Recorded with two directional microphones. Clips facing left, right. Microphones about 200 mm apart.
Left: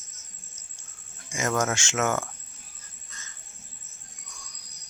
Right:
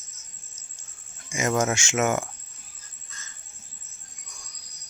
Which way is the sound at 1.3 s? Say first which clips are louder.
Right 2 dB; 20° right (ahead or behind).